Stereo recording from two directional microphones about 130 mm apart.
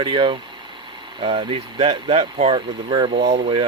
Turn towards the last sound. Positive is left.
turn(degrees=-45)  # may be behind; listen again after turning